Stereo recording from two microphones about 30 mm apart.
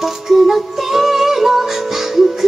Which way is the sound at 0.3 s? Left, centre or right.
Centre.